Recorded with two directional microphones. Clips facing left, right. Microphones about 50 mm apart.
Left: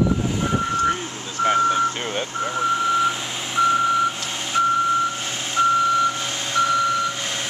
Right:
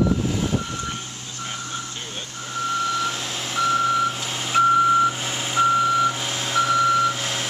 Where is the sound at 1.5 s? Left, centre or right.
Left.